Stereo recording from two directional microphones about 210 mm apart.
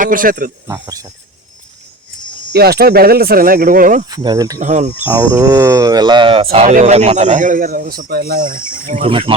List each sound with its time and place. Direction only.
0.0 s speech: 40° right (ahead or behind)
0.7 s speech: 15° right (ahead or behind)
2.5 s speech: 50° right (ahead or behind)
4.1 s speech: 20° right (ahead or behind)
4.6 s speech: 35° right (ahead or behind)
5.0 s speech: 15° right (ahead or behind); by 9.0 s 40° right (ahead or behind)
9.0 s speech: 25° right (ahead or behind)